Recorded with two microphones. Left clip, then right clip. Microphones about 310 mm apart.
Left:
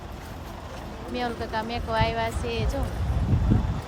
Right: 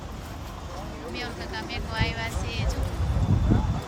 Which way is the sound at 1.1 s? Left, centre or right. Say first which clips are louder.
Left 7 dB; centre.